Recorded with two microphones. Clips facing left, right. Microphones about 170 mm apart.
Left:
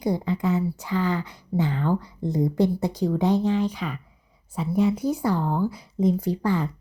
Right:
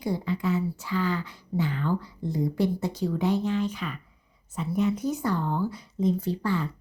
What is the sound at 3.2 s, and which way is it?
Speech, 35° left (ahead or behind).